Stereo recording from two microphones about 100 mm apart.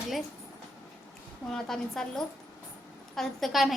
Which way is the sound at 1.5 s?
5° left (ahead or behind).